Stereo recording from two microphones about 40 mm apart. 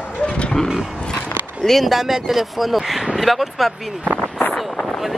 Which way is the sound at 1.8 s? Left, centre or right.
Centre.